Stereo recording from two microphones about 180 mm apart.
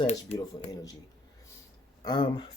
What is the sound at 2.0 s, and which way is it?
Speech, 25° left (ahead or behind).